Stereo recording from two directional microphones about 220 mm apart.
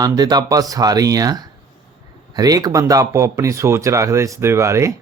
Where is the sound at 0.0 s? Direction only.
20° right (ahead or behind).